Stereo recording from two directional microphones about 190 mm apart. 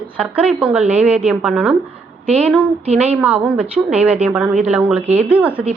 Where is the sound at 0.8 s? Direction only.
35° right (ahead or behind).